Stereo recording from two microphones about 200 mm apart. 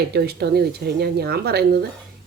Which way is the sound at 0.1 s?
55° right (ahead or behind).